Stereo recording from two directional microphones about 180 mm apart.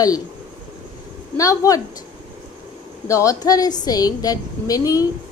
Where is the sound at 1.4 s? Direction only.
20° left (ahead or behind).